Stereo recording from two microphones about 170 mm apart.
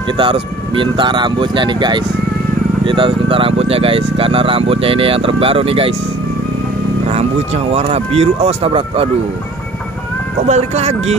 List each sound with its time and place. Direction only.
0.2 s speech: 30° right (ahead or behind)
7.1 s speech: 40° right (ahead or behind)
10.5 s speech: 40° right (ahead or behind)